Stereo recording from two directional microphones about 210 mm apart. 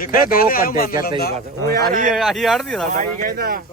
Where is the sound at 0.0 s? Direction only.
45° left (ahead or behind).